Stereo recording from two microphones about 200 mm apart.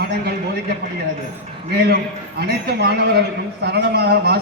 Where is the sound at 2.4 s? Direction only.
55° right (ahead or behind).